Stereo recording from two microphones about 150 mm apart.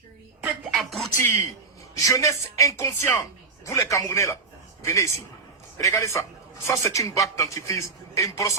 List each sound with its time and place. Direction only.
0.6 s music: centre (ahead or behind)
2.0 s a man's voice: 20° left (ahead or behind)